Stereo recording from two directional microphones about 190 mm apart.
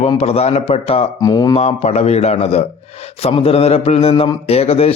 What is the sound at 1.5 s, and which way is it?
A man's voice, 30° left (ahead or behind).